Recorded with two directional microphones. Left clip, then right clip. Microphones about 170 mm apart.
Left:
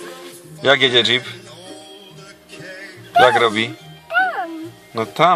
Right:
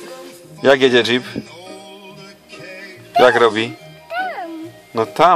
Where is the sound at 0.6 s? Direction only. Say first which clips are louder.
Right 1 dB; 25° right (ahead or behind).